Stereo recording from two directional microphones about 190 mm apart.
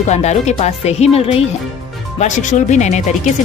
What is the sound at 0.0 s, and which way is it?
A woman's voice, 35° left (ahead or behind).